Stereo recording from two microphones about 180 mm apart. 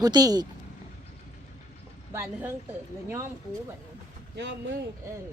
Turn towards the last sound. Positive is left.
turn(degrees=-80)